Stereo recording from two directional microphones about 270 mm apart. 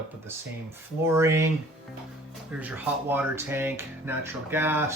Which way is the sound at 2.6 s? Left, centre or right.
Centre.